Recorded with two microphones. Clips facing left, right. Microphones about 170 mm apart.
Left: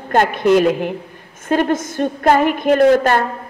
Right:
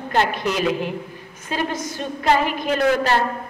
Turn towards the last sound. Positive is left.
turn(degrees=50)  # may be behind; listen again after turning